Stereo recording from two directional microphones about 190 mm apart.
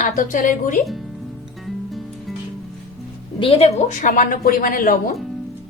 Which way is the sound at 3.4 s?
30° left (ahead or behind).